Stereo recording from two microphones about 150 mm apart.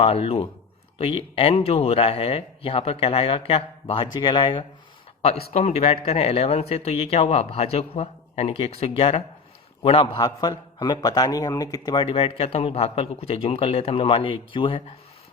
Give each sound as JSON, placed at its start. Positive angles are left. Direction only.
{"t": 0.0, "sound": "a man's voice", "side_deg": 40}
{"t": 5.2, "sound": "a man's voice", "side_deg": 40}